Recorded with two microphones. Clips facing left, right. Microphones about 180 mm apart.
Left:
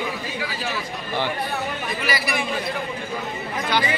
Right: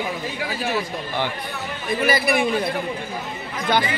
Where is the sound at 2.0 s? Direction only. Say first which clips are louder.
Right 7 dB; 55° right (ahead or behind).